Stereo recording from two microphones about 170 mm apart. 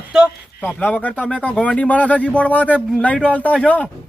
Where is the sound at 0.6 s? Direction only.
10° left (ahead or behind).